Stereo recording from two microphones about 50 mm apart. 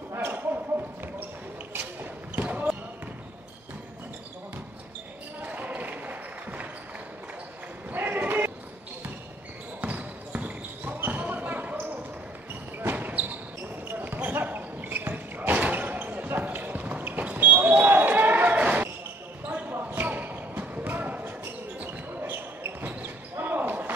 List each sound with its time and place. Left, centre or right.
0.1 s basketball bounce: right
2.3 s basketball bounce: right
5.4 s basketball bounce: right
7.9 s a sound: right
9.8 s basketball bounce: right
19.6 s basketball bounce: right